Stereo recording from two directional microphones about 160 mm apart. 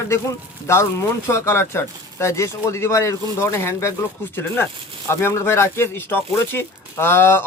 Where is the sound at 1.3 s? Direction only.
15° left (ahead or behind).